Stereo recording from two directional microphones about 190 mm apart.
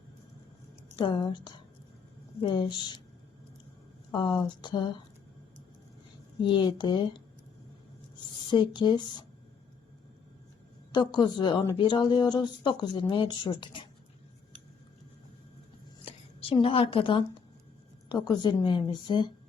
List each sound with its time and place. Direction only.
0.9 s a woman's voice: 25° left (ahead or behind)
4.1 s a woman's voice: 25° left (ahead or behind)
6.4 s a woman's voice: 25° left (ahead or behind)
8.4 s a woman's voice: 25° left (ahead or behind)
10.9 s a woman's voice: 25° left (ahead or behind)
16.0 s speech: 30° left (ahead or behind)
18.4 s a woman's voice: 25° left (ahead or behind)